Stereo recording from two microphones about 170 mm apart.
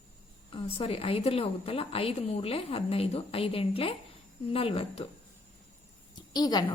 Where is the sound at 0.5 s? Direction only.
35° left (ahead or behind).